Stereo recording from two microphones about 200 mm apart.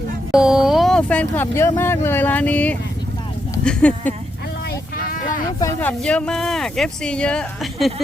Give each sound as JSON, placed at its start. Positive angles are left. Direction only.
{"t": 0.3, "sound": "speech", "side_deg": -5}
{"t": 4.7, "sound": "vehicle", "side_deg": 45}
{"t": 5.5, "sound": "speech", "side_deg": 15}
{"t": 6.0, "sound": "speech", "side_deg": 5}